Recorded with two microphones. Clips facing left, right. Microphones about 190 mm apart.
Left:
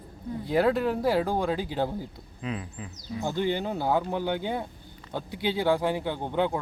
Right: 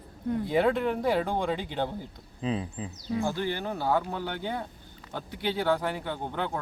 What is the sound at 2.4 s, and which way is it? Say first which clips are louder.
Speech: right 4 dB; 30° right (ahead or behind).